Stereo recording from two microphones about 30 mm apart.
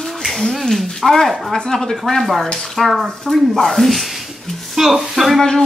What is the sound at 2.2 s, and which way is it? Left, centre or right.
A woman's voice, centre.